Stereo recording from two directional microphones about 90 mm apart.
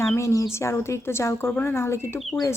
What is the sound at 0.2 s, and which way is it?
A woman's voice, 35° left (ahead or behind).